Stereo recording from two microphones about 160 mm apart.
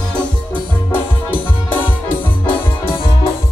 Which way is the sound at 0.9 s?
10° left (ahead or behind).